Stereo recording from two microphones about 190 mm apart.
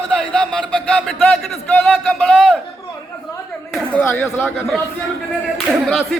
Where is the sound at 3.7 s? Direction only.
5° left (ahead or behind).